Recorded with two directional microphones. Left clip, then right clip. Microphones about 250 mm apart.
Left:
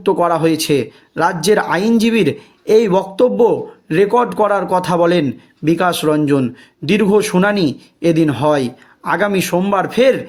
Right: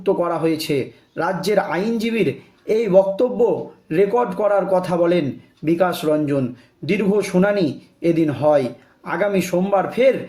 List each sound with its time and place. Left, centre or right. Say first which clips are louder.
0.0 s speech: left 5 dB; left